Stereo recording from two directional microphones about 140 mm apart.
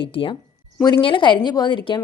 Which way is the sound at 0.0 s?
40° left (ahead or behind).